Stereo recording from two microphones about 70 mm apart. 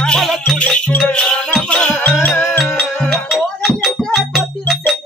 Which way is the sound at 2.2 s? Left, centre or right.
Left.